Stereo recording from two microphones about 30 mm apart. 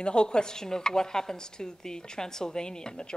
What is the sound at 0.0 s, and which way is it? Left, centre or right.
Speech, left.